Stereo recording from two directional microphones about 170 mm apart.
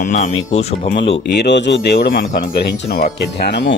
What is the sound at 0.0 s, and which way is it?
Speech, 40° left (ahead or behind).